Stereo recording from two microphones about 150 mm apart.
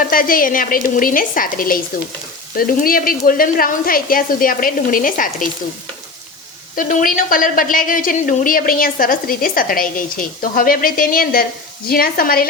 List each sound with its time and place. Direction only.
0.0 s a woman's voice: 70° left (ahead or behind)
6.7 s a woman's voice: 60° left (ahead or behind); by 12.5 s 80° left